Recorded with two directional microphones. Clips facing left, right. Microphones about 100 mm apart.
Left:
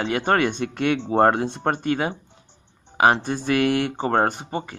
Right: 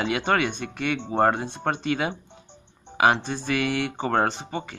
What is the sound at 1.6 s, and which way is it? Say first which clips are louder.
Speech: left 3 dB; 40° left (ahead or behind).